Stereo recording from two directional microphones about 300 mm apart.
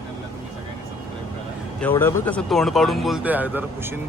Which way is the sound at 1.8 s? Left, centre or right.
Centre.